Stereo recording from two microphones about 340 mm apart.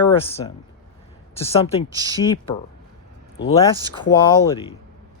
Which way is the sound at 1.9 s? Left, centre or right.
Centre.